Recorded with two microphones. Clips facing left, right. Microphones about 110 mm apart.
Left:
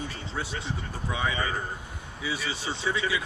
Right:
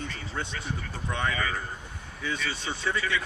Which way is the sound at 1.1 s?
5° left (ahead or behind).